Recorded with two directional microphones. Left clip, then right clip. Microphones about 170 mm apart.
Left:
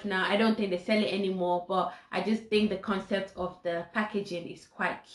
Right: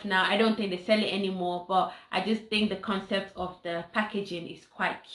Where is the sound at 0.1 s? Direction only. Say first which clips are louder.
Right 3 dB; 15° right (ahead or behind).